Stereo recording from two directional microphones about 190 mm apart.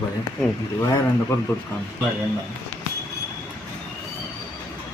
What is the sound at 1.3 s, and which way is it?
Speech, 15° left (ahead or behind).